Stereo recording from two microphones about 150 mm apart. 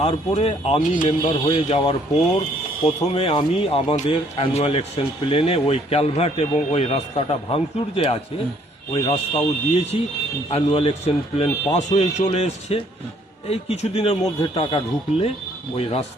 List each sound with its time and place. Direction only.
0.0 s a man's voice: 40° left (ahead or behind)